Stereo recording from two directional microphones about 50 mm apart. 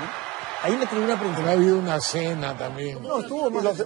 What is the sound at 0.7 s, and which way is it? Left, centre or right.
A man's voice, centre.